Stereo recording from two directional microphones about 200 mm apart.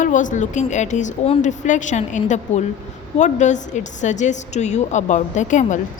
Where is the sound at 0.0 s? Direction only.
40° left (ahead or behind).